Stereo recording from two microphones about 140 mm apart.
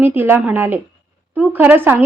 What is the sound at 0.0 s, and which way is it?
A woman's voice, 15° right (ahead or behind).